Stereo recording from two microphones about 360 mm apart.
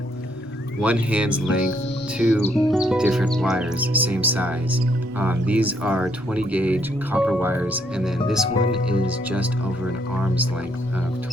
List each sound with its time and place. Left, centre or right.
0.8 s speech: centre